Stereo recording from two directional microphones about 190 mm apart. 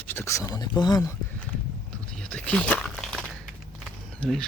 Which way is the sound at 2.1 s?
5° left (ahead or behind).